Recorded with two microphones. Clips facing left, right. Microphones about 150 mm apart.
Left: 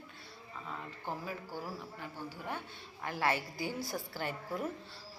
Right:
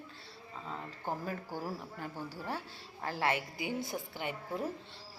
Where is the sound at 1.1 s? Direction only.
45° right (ahead or behind).